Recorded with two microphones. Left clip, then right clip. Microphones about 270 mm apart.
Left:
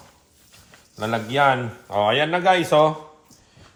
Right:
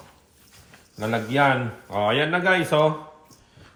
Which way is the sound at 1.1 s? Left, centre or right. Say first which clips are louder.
Left 2 dB; centre.